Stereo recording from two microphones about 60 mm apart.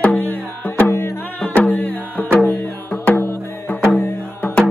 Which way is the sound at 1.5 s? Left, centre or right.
Left.